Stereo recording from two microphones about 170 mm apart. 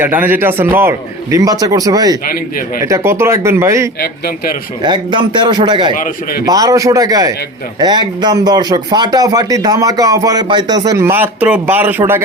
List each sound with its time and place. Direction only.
0.0 s a man's voice: 10° right (ahead or behind)
4.8 s speech: 25° right (ahead or behind); by 12.2 s 10° right (ahead or behind)